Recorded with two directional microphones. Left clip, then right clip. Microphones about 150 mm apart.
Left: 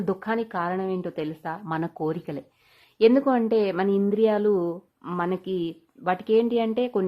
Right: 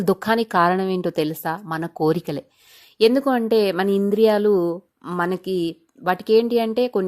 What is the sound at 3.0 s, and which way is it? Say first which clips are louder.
Speech: right 2 dB; 30° right (ahead or behind).